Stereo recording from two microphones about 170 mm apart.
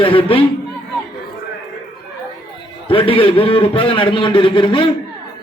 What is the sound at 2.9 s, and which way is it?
A man's voice, 30° left (ahead or behind).